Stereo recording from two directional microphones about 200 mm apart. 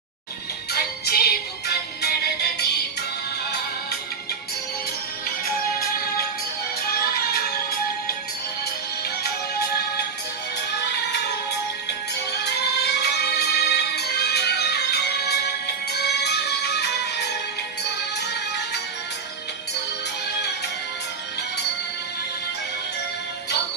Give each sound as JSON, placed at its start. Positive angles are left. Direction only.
{"t": 0.7, "sound": "music", "side_deg": 50}
{"t": 6.8, "sound": "music", "side_deg": 50}
{"t": 12.3, "sound": "music", "side_deg": 55}
{"t": 18.2, "sound": "music", "side_deg": 55}